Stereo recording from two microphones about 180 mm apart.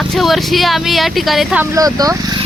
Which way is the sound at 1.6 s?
20° right (ahead or behind).